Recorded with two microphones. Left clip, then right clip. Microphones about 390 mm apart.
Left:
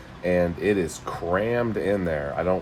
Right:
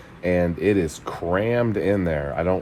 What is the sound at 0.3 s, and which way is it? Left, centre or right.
Speech, centre.